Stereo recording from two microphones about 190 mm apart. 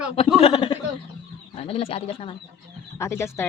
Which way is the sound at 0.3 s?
30° left (ahead or behind).